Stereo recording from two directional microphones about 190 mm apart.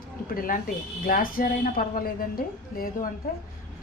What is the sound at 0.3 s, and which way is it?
A woman's voice, 50° left (ahead or behind).